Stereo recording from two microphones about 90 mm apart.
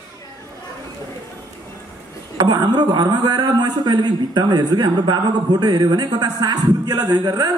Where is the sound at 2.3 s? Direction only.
55° right (ahead or behind).